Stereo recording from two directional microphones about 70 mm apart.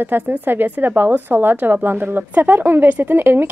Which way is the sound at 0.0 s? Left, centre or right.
Right.